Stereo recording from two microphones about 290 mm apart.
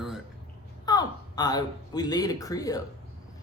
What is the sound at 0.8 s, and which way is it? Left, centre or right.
Speech, centre.